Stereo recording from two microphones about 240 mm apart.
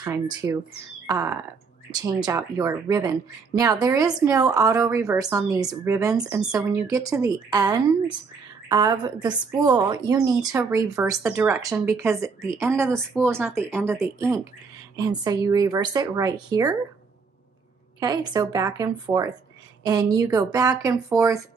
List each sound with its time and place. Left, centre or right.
0.0 s a woman's voice: centre
6.2 s a woman's voice: centre
18.0 s a woman's voice: centre